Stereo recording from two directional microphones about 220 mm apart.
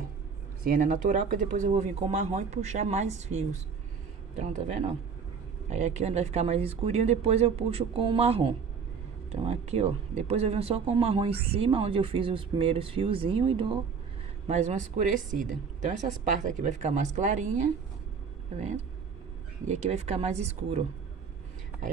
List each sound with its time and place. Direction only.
0.7 s speech: 40° right (ahead or behind)
19.7 s speech: 30° right (ahead or behind)